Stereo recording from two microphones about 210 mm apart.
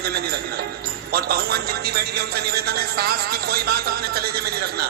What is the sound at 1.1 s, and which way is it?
A man's voice, 45° right (ahead or behind).